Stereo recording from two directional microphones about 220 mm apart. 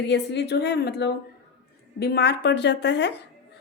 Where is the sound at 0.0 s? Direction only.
50° left (ahead or behind).